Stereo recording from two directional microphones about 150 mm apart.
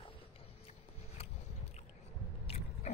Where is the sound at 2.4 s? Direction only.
40° left (ahead or behind).